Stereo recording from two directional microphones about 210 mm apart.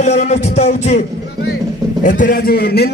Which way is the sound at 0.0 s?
35° left (ahead or behind).